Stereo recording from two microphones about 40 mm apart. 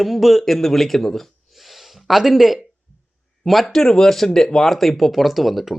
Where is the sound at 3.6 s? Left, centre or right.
Centre.